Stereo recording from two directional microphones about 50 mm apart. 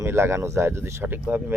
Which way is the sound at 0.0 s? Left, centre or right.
Right.